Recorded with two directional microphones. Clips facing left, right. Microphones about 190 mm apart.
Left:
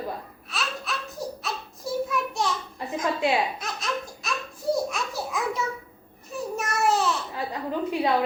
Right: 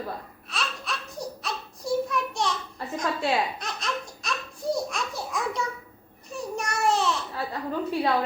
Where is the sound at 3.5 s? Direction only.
Centre (ahead or behind).